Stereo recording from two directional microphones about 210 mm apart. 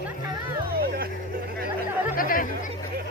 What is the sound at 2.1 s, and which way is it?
Music, 40° left (ahead or behind).